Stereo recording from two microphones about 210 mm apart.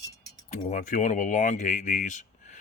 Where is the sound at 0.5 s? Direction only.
35° left (ahead or behind).